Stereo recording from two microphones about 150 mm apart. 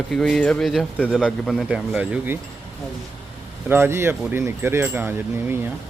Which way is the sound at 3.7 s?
15° right (ahead or behind).